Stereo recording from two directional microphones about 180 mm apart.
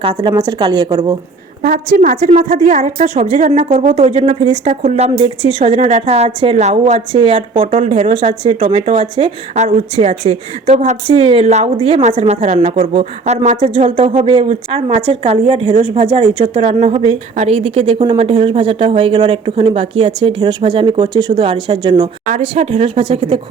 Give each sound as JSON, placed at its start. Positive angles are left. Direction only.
{"t": 0.0, "sound": "a woman's voice", "side_deg": -30}
{"t": 2.0, "sound": "a woman's voice", "side_deg": -40}